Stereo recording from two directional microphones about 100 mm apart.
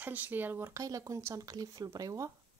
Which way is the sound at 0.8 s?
35° right (ahead or behind).